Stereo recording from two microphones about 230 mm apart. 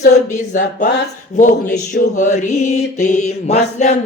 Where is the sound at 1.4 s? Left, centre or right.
Left.